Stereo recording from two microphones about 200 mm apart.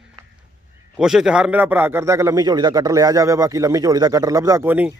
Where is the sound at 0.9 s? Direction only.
5° right (ahead or behind).